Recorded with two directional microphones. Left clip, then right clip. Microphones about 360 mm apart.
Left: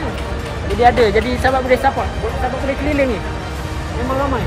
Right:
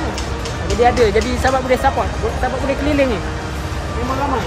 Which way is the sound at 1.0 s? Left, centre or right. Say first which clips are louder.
Left 1 dB; centre.